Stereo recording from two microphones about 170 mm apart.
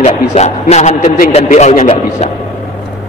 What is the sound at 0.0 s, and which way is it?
A man's voice, 40° left (ahead or behind).